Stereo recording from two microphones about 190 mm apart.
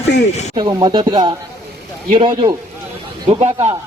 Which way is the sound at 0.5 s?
20° right (ahead or behind).